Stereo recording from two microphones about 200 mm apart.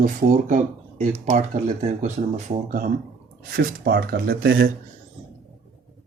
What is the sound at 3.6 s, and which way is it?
Speech, 50° right (ahead or behind).